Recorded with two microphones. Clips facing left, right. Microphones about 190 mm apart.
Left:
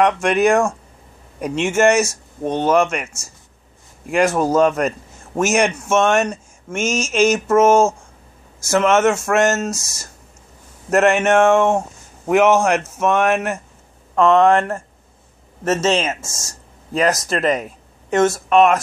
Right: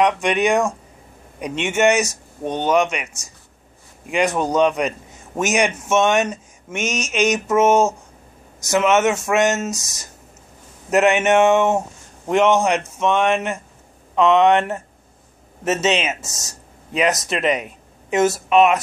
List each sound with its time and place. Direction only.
0.0 s a man's voice: centre (ahead or behind)
4.1 s a man's voice: centre (ahead or behind)
6.8 s a sound: 30° left (ahead or behind)
7.1 s a man's voice: centre (ahead or behind)